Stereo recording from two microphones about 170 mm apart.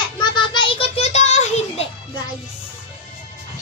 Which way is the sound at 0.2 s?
25° left (ahead or behind).